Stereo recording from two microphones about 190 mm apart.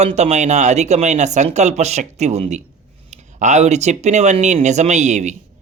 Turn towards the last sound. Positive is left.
turn(degrees=-40)  # may be behind; listen again after turning